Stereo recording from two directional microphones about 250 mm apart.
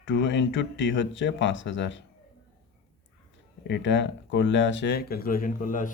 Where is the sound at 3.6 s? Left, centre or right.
Left.